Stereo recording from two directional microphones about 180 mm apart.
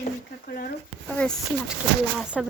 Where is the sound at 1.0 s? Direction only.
5° left (ahead or behind).